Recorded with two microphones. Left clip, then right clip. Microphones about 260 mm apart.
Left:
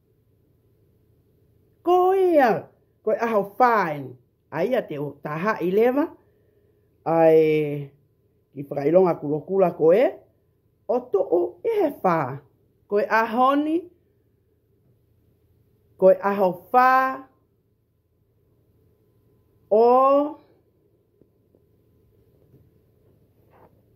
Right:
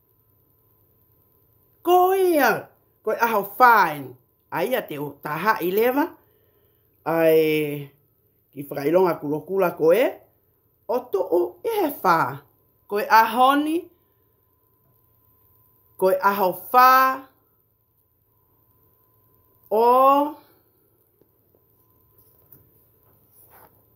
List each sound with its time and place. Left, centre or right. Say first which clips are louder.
1.8 s a sound: right 1 dB; centre
4.5 s speech: left 1 dB; centre
16.0 s speech: left 2 dB; centre
19.7 s speech: even; centre